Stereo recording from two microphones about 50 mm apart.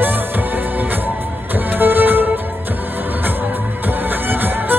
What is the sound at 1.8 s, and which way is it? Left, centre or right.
Music, right.